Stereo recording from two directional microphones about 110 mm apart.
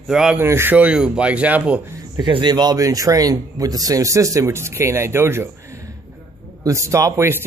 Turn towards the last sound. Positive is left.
turn(degrees=-25)  # may be behind; listen again after turning